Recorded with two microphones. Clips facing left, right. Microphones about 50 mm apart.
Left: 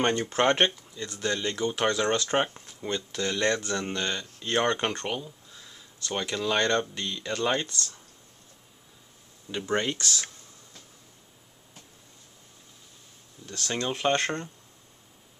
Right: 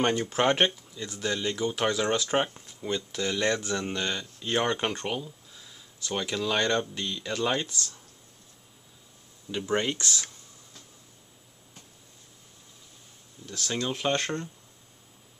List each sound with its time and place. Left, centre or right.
0.0 s speech: centre
2.9 s speech: centre
9.7 s speech: centre
13.5 s speech: centre
14.1 s speech: left